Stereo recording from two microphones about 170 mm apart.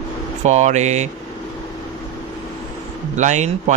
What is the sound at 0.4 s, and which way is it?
Speech, 45° right (ahead or behind).